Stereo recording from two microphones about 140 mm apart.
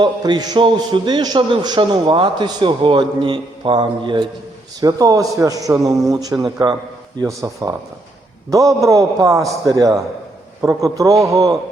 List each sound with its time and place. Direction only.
0.0 s a man's voice: 30° right (ahead or behind)